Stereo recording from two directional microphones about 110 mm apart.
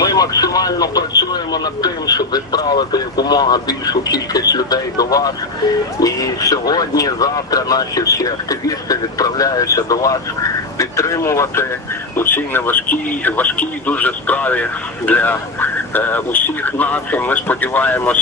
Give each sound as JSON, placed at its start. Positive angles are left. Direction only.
{"t": 0.0, "sound": "speech", "side_deg": 35}